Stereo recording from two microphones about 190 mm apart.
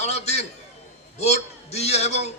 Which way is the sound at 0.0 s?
35° left (ahead or behind).